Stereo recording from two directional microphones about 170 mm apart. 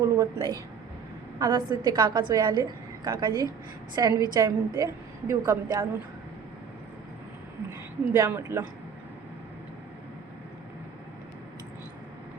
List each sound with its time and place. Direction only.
0.0 s a woman's voice: 20° right (ahead or behind)
8.1 s a woman's voice: 15° right (ahead or behind)